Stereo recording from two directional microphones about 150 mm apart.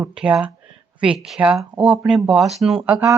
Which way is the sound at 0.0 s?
10° right (ahead or behind).